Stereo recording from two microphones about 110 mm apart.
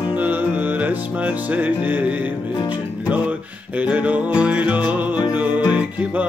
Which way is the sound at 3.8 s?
15° right (ahead or behind).